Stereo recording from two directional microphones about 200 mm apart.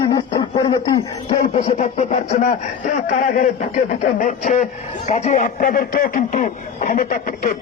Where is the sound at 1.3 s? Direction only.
40° left (ahead or behind).